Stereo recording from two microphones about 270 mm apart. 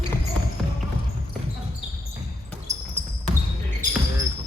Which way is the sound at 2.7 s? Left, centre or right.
Right.